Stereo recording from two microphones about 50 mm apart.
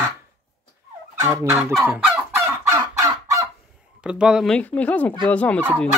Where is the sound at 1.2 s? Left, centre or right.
Right.